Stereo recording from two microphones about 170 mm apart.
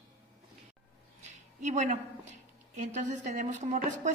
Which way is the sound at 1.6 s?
45° right (ahead or behind).